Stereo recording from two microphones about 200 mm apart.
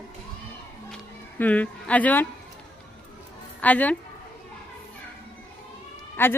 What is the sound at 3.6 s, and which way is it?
Speech, 5° left (ahead or behind).